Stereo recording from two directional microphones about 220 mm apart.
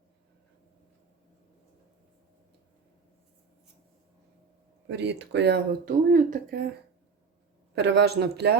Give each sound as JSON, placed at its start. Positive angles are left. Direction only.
{"t": 4.9, "sound": "speech", "side_deg": -50}
{"t": 7.8, "sound": "speech", "side_deg": -50}